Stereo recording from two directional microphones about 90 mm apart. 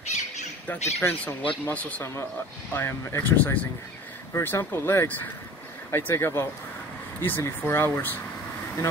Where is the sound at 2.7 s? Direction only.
25° left (ahead or behind).